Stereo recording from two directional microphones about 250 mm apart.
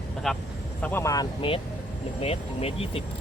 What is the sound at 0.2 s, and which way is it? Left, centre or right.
Speech, centre.